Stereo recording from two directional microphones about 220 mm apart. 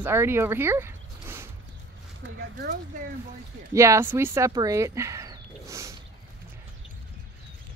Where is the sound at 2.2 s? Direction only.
50° right (ahead or behind).